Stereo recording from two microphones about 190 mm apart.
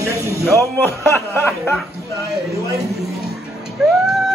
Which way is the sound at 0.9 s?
10° left (ahead or behind).